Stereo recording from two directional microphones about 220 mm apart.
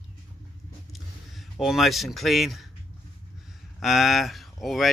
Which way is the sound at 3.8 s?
Centre (ahead or behind).